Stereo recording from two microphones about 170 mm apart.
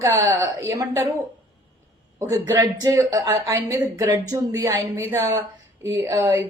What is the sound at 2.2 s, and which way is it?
Speech, 20° right (ahead or behind).